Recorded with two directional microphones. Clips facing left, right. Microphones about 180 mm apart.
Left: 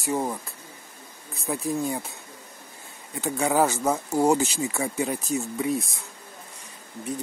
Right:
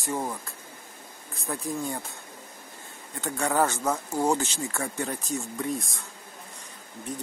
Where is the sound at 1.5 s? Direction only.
10° left (ahead or behind).